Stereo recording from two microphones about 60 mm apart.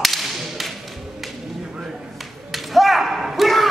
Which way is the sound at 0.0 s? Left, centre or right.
Centre.